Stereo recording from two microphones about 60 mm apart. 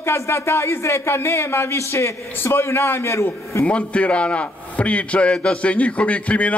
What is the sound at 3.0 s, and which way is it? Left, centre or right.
Speech, left.